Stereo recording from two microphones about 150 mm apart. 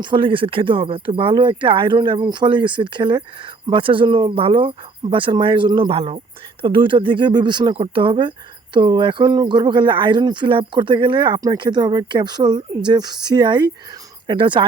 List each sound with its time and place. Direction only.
0.0 s speech: 35° right (ahead or behind)